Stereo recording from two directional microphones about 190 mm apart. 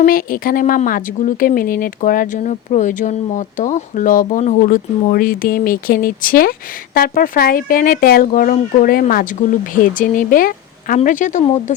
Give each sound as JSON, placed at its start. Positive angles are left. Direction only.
{"t": 0.0, "sound": "speech", "side_deg": 50}